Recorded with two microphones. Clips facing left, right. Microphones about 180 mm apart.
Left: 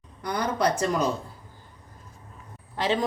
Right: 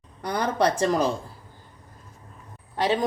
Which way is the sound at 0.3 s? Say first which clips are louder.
Right 2 dB; 30° right (ahead or behind).